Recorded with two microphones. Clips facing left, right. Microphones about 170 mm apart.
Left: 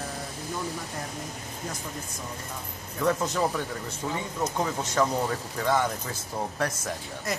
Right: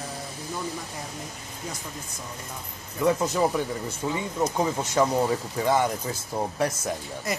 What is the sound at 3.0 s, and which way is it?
Speech, 10° right (ahead or behind).